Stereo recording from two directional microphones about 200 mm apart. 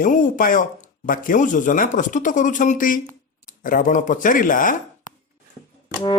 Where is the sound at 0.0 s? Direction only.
45° left (ahead or behind).